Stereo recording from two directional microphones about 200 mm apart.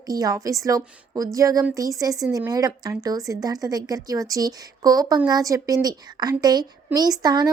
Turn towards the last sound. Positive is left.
turn(degrees=-20)  # may be behind; listen again after turning